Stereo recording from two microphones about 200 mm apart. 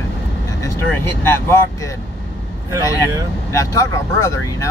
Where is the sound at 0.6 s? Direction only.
10° left (ahead or behind).